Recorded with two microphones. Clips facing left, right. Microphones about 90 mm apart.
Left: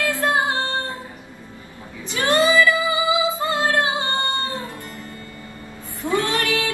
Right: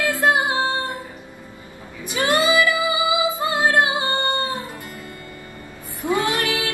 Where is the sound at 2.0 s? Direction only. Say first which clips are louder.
Left 1 dB; 15° right (ahead or behind).